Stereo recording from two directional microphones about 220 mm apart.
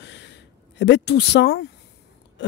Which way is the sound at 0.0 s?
50° left (ahead or behind).